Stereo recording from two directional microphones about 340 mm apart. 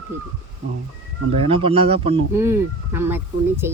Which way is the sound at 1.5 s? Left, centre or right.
Centre.